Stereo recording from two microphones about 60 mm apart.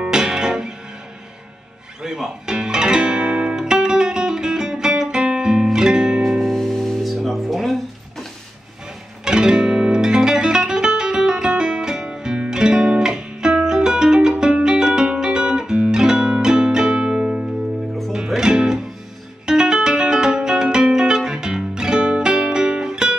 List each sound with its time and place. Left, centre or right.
0.0 s music: centre
2.0 s music: centre
9.2 s music: centre